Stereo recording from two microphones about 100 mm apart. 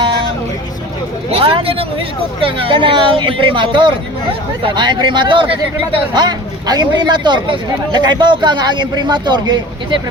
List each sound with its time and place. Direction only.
1.3 s speech: 65° right (ahead or behind)
6.1 s speech: 45° right (ahead or behind)